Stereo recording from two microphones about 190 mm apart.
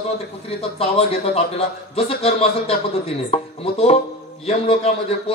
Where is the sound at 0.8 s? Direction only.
30° left (ahead or behind).